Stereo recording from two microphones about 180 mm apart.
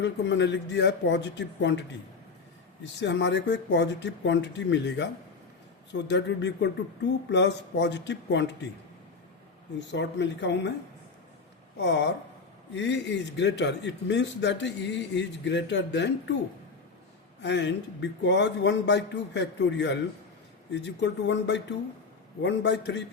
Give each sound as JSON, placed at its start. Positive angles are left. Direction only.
{"t": 0.0, "sound": "a man's voice", "side_deg": 80}
{"t": 3.0, "sound": "a man's voice", "side_deg": 75}
{"t": 9.9, "sound": "a man's voice", "side_deg": 80}
{"t": 11.8, "sound": "a man's voice", "side_deg": 75}
{"t": 17.4, "sound": "a man's voice", "side_deg": 80}